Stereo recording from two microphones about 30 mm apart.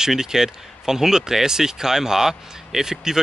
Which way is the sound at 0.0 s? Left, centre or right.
Centre.